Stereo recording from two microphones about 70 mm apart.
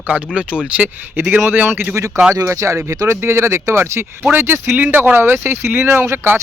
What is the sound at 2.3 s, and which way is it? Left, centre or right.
Speech, right.